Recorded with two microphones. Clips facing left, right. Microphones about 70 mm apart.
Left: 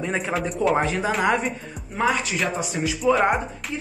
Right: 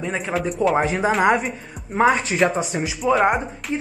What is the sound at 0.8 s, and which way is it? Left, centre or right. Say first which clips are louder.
Speech: right 4 dB; centre.